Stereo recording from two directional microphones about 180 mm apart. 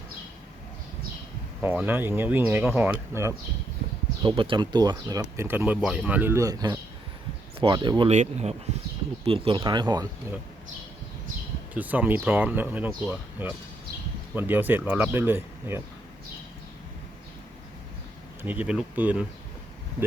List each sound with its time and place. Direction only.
1.6 s speech: 10° right (ahead or behind)
4.2 s speech: 30° right (ahead or behind)
8.1 s speech: 40° right (ahead or behind); by 10.1 s 25° right (ahead or behind)
11.7 s speech: 10° right (ahead or behind)
18.4 s speech: 10° right (ahead or behind)